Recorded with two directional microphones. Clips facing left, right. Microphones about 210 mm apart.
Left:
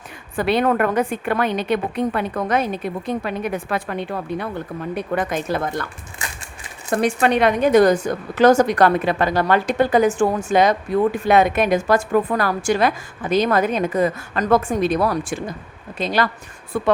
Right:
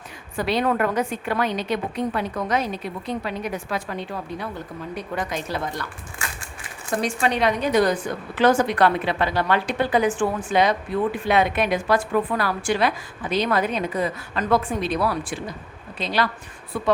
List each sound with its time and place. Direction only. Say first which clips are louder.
0.3 s a woman's voice: left 4 dB; 55° left (ahead or behind)
7.0 s a woman's voice: left 5 dB; 60° left (ahead or behind)